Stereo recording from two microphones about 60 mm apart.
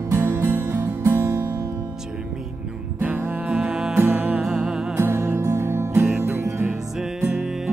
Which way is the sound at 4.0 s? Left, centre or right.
Right.